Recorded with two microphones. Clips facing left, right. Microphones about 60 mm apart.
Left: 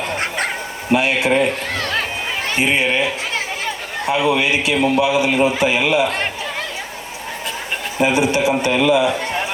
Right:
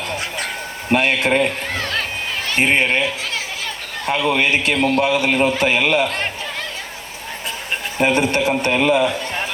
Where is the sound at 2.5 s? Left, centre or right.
Right.